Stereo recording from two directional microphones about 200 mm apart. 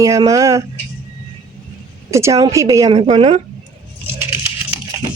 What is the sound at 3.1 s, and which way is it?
Speech, 30° right (ahead or behind).